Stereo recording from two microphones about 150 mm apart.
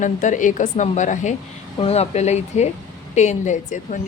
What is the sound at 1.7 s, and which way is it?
A woman's voice, 45° left (ahead or behind).